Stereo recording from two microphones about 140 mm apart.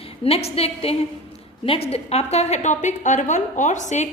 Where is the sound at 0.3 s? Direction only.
45° left (ahead or behind).